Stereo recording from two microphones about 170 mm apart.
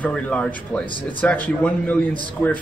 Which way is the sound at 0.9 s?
30° left (ahead or behind).